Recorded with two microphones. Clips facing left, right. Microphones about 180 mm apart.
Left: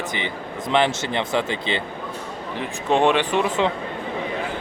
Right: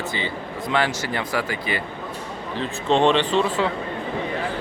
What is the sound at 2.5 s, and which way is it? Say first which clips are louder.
Speech: even; 15° left (ahead or behind).